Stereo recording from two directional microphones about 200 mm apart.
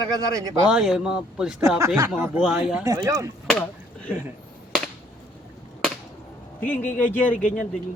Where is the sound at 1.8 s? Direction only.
15° right (ahead or behind).